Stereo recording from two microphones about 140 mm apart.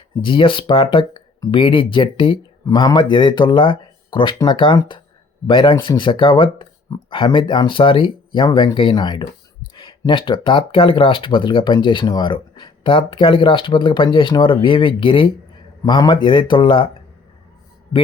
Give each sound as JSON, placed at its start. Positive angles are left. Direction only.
{"t": 0.2, "sound": "speech", "side_deg": 35}